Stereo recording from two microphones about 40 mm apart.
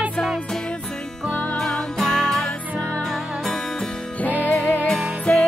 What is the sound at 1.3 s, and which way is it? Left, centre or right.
Music, left.